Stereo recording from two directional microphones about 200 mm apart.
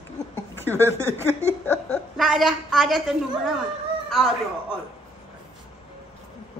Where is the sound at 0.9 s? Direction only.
15° right (ahead or behind).